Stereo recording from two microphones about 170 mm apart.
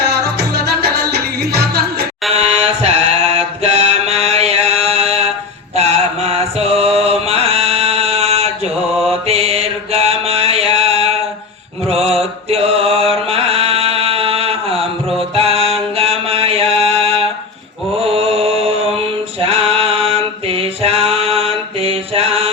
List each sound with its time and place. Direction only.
0.3 s music: 70° right (ahead or behind)
2.3 s mantra: 40° right (ahead or behind)
6.2 s chant: 35° right (ahead or behind)
9.2 s mantra: 35° right (ahead or behind)
12.5 s mantra: 35° right (ahead or behind)
15.4 s music: 35° right (ahead or behind)
16.0 s a sound: 35° right (ahead or behind)
18.1 s mantra: 35° right (ahead or behind)
19.5 s a sound: 35° right (ahead or behind)